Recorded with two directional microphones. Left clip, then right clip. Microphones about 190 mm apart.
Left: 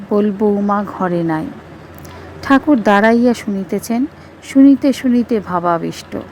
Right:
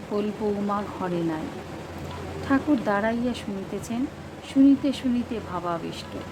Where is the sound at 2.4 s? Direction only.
45° left (ahead or behind).